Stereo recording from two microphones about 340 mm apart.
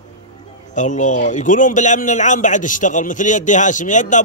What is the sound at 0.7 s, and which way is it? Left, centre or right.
A man's voice, left.